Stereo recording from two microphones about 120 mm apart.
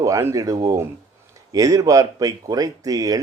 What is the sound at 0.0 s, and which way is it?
Speech, 25° right (ahead or behind).